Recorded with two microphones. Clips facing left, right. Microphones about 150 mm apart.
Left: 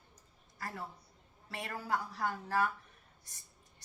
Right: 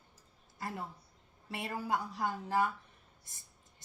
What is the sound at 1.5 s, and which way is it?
Speech, 15° right (ahead or behind).